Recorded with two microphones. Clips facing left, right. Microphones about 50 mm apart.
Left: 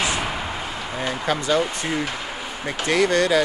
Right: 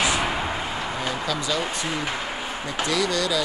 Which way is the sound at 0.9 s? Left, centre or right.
Left.